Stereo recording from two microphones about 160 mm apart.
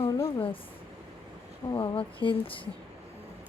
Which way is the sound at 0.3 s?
35° left (ahead or behind).